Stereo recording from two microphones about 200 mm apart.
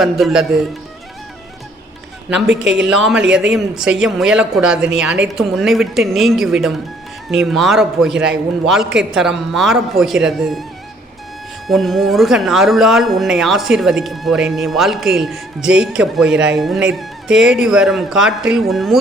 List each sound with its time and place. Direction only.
0.0 s speech: centre (ahead or behind)
2.6 s speech: 5° right (ahead or behind)
11.7 s speech: centre (ahead or behind)